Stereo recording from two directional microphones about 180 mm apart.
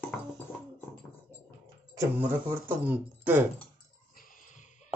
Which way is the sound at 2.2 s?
10° right (ahead or behind).